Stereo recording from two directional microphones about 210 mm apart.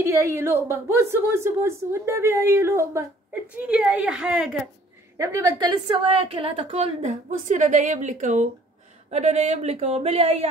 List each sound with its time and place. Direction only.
0.0 s a woman's voice: 15° right (ahead or behind)
5.1 s a woman's voice: 15° right (ahead or behind)